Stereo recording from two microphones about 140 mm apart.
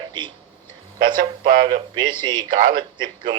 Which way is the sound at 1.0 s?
90° right.